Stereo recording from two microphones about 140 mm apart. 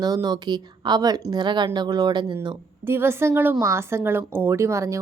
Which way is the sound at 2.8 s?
15° right (ahead or behind).